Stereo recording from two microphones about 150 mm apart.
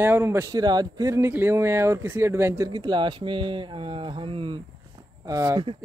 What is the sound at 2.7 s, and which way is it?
Speech, 30° right (ahead or behind).